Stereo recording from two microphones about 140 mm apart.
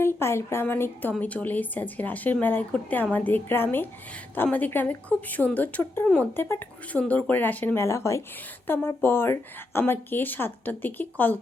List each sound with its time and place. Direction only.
0.0 s speech: 15° left (ahead or behind)